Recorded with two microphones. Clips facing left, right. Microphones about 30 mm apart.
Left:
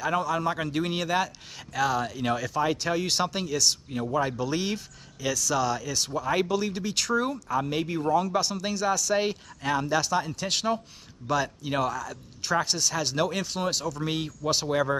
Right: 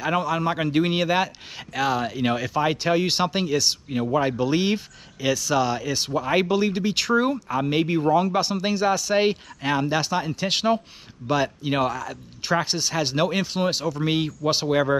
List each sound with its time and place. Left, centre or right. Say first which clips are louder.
0.0 s a man's voice: right 3 dB; right